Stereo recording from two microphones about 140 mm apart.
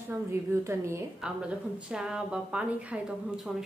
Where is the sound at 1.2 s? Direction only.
5° right (ahead or behind).